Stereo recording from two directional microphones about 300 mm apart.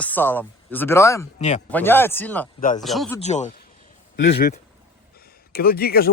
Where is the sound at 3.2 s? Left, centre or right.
Left.